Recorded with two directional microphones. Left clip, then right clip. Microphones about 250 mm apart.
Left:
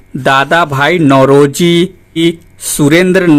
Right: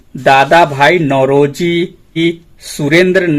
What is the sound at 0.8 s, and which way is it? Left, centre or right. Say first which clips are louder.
Speech: left 2 dB; left.